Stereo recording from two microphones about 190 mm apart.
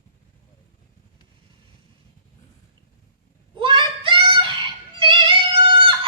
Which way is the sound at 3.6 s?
25° right (ahead or behind).